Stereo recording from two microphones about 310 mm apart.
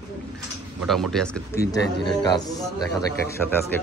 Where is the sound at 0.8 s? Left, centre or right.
Centre.